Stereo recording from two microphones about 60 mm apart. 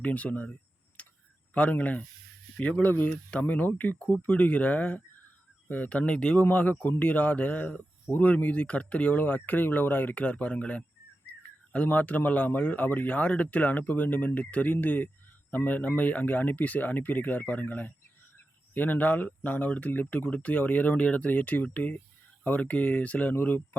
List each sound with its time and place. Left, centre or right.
0.0 s speech: left
1.0 s tick-tock: left
1.5 s speech: left